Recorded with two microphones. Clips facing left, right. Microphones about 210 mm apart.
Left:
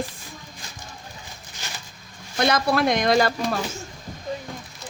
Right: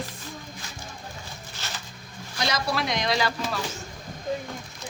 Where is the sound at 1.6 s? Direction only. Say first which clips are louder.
Even; 15° left (ahead or behind).